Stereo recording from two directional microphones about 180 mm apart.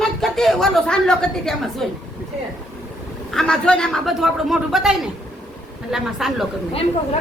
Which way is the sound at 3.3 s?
5° left (ahead or behind).